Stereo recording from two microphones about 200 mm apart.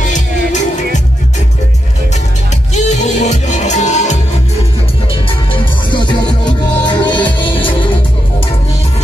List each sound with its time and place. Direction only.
2.7 s music: 35° left (ahead or behind)
5.5 s music: 25° left (ahead or behind)